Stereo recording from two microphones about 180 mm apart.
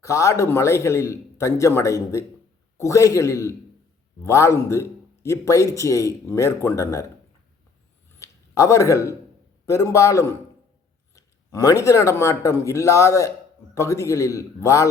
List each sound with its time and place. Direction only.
0.0 s speech: 15° left (ahead or behind)
8.2 s a sound: 15° left (ahead or behind)
9.6 s speech: 15° left (ahead or behind)